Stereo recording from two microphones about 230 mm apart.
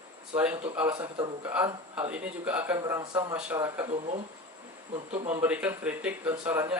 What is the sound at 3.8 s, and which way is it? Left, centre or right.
Speech, right.